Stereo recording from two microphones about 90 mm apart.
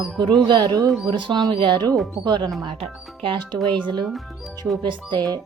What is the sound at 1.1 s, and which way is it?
Speech, 60° right (ahead or behind).